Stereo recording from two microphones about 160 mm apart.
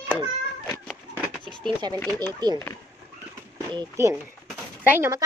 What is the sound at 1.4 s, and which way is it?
Speech, 30° right (ahead or behind).